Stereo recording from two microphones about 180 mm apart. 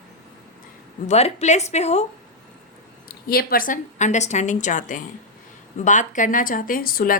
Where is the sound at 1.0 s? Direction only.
35° left (ahead or behind).